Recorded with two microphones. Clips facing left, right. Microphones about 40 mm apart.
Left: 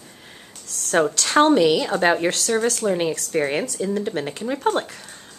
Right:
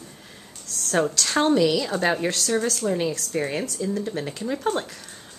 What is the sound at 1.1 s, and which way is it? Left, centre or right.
Speech, left.